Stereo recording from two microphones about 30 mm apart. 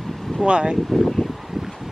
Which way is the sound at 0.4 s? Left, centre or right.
Right.